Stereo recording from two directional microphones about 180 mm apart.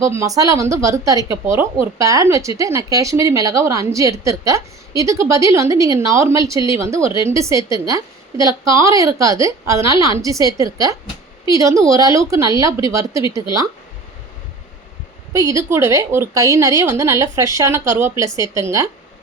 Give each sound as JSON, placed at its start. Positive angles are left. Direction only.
{"t": 0.0, "sound": "speech", "side_deg": -15}
{"t": 15.3, "sound": "speech", "side_deg": -20}